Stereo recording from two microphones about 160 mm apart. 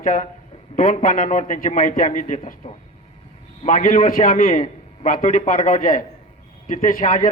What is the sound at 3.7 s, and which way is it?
A man's voice, 55° left (ahead or behind).